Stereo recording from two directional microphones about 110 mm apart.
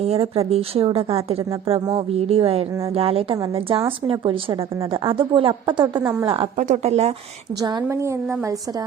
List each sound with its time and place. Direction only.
0.0 s a woman's voice: 65° right (ahead or behind); by 5.8 s 50° right (ahead or behind)
6.0 s a woman's voice: 20° right (ahead or behind)
6.2 s a woman's voice: 55° right (ahead or behind)
6.6 s speech: 75° right (ahead or behind)
7.6 s a woman's voice: 40° right (ahead or behind)
7.9 s a woman's voice: 25° right (ahead or behind)